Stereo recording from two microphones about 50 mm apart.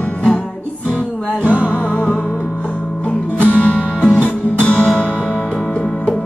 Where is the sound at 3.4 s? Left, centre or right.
Left.